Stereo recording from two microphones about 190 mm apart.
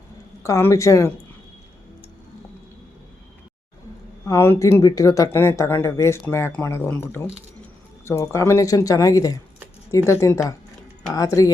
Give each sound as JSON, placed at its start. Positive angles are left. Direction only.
{"t": 0.4, "sound": "speech", "side_deg": 15}
{"t": 4.3, "sound": "speech", "side_deg": 15}